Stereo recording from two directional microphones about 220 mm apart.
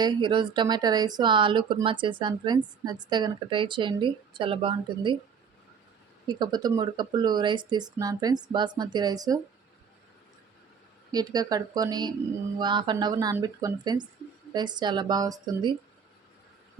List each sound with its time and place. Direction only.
0.0 s speech: 20° right (ahead or behind)
6.2 s speech: 20° right (ahead or behind)
11.1 s speech: 15° right (ahead or behind)